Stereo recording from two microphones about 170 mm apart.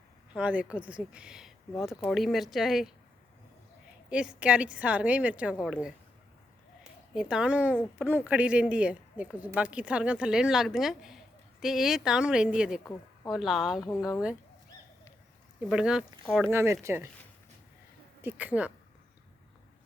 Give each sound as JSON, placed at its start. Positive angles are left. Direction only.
{"t": 0.3, "sound": "speech", "side_deg": -5}
{"t": 4.1, "sound": "speech", "side_deg": -5}
{"t": 7.1, "sound": "speech", "side_deg": -5}
{"t": 12.8, "sound": "speech", "side_deg": 20}
{"t": 13.3, "sound": "speech", "side_deg": 0}
{"t": 15.7, "sound": "speech", "side_deg": -5}
{"t": 18.2, "sound": "speech", "side_deg": -10}